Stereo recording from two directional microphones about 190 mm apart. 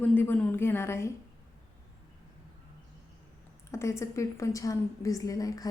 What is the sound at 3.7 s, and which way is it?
A woman's voice, 15° left (ahead or behind).